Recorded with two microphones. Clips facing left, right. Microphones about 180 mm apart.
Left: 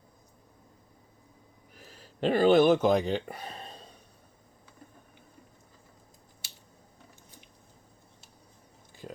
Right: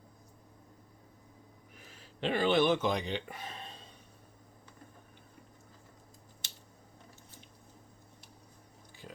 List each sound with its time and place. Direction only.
1.7 s speech: 40° left (ahead or behind)